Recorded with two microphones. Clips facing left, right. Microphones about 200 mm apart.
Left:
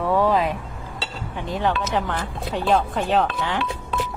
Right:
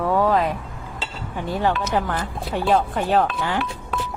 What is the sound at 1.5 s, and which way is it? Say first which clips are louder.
Speech: right 1 dB; 5° right (ahead or behind).